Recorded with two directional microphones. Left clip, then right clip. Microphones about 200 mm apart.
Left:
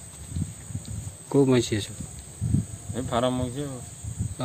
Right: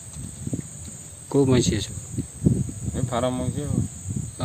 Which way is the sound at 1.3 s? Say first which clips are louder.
Right 1 dB; 5° right (ahead or behind).